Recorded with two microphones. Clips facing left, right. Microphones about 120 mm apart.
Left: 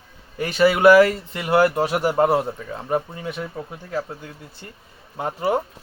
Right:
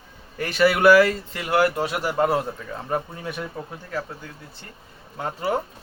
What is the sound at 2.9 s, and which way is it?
Speech, 10° left (ahead or behind).